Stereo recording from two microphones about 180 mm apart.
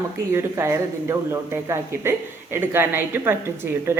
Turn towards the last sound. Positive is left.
turn(degrees=-15)  # may be behind; listen again after turning